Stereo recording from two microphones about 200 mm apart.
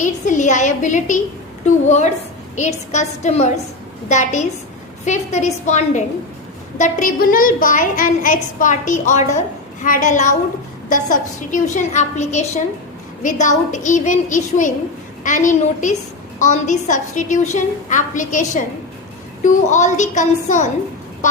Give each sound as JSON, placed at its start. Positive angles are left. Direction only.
{"t": 0.0, "sound": "a woman's voice", "side_deg": 40}